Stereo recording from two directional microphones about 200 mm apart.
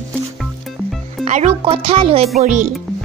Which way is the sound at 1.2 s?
35° right (ahead or behind).